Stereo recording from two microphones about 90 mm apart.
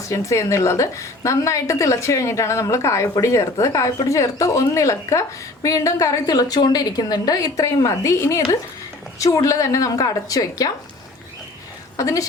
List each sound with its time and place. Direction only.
0.1 s a woman's voice: 35° left (ahead or behind)
11.9 s a woman's voice: 40° left (ahead or behind)